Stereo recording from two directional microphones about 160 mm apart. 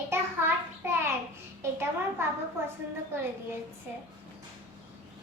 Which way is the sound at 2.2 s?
15° right (ahead or behind).